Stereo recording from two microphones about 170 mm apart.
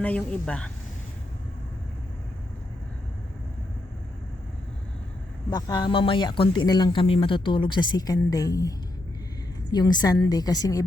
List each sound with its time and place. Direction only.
0.0 s speech: 5° left (ahead or behind)
5.5 s speech: 25° left (ahead or behind)
9.7 s speech: 25° left (ahead or behind)